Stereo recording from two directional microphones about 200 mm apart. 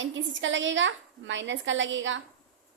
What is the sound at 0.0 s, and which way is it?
A woman's voice, 70° right (ahead or behind).